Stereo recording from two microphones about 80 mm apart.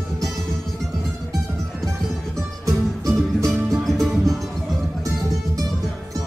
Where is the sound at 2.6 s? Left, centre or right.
Right.